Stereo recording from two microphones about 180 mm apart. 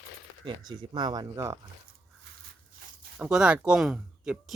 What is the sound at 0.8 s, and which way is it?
Speech, 25° right (ahead or behind).